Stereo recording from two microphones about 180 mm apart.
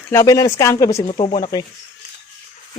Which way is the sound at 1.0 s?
30° left (ahead or behind).